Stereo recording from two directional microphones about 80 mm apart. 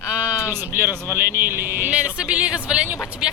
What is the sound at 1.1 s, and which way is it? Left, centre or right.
Speech, right.